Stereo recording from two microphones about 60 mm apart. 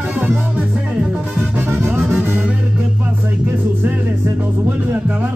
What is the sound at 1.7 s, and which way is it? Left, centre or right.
Music, right.